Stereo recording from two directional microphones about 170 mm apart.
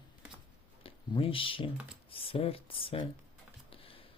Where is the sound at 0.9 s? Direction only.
30° left (ahead or behind).